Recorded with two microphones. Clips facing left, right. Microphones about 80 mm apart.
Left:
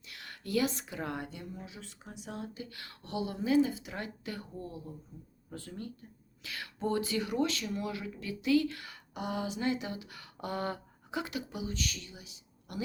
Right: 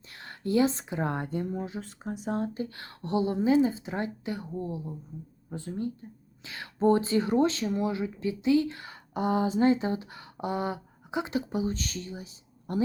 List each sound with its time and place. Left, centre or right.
0.1 s speech: right